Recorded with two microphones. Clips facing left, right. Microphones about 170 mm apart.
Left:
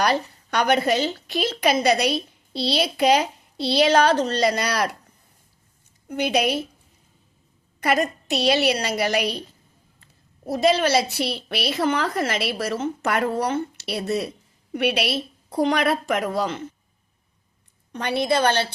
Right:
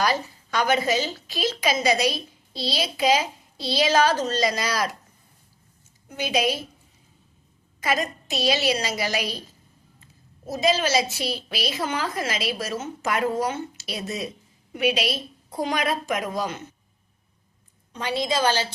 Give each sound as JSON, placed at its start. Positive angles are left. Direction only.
{"t": 0.1, "sound": "a woman's voice", "side_deg": 60}
{"t": 6.1, "sound": "a woman's voice", "side_deg": 60}
{"t": 7.8, "sound": "a woman's voice", "side_deg": 60}
{"t": 10.4, "sound": "a woman's voice", "side_deg": 60}
{"t": 17.9, "sound": "a woman's voice", "side_deg": 65}